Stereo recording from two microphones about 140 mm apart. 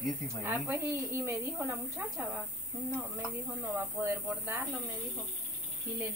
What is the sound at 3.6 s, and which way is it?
Speech, 15° right (ahead or behind).